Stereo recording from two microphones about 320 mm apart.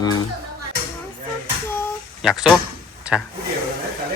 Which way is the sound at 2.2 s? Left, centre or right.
Centre.